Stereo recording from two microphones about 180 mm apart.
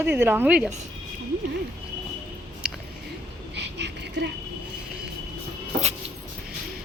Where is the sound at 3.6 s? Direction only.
70° right (ahead or behind).